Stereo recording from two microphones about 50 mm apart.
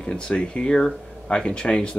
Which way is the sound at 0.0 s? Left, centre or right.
Centre.